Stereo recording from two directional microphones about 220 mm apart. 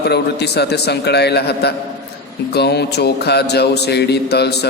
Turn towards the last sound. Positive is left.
turn(degrees=50)  # may be behind; listen again after turning